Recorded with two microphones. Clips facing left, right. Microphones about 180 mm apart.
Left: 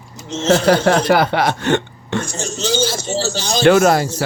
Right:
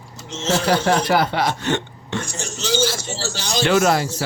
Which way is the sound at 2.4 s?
25° left (ahead or behind).